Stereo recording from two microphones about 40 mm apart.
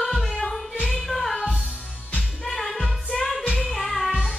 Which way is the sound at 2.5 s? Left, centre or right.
Centre.